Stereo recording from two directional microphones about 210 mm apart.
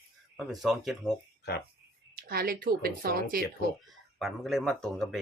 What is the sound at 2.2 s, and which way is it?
Speech, 45° right (ahead or behind).